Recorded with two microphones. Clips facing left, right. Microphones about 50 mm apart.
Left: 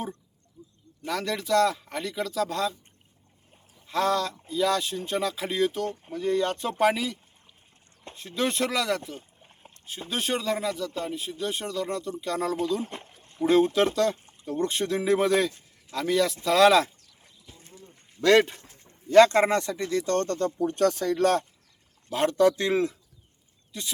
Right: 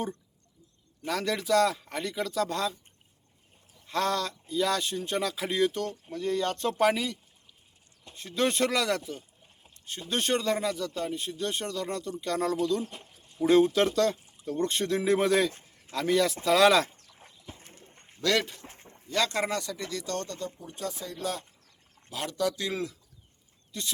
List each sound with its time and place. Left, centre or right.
1.0 s speech: centre
3.8 s speech: centre
10.1 s speech: centre
12.8 s a sound: left
13.8 s speech: centre
17.0 s a sound: right
18.2 s speech: left
18.6 s a sound: right
19.0 s speech: left
22.1 s speech: left
23.7 s speech: centre